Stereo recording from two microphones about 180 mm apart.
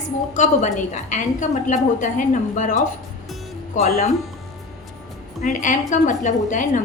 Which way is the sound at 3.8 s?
45° left (ahead or behind).